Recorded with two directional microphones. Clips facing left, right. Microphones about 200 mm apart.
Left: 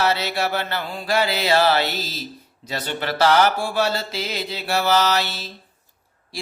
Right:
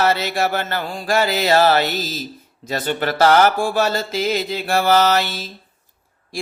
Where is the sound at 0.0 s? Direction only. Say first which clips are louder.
Right 3 dB; 50° right (ahead or behind).